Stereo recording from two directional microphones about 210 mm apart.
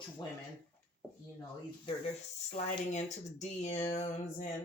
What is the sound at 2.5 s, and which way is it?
Speech, 35° left (ahead or behind).